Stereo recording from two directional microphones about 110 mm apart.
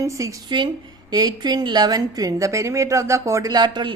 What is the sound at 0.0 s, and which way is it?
A woman's voice, 30° right (ahead or behind).